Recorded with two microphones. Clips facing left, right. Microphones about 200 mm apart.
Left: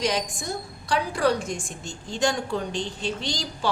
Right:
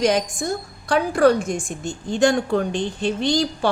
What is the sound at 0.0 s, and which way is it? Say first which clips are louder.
A woman's voice: right 7 dB; 50° right (ahead or behind).